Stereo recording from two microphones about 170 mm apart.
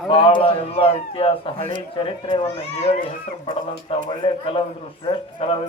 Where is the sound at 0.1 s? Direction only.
30° left (ahead or behind).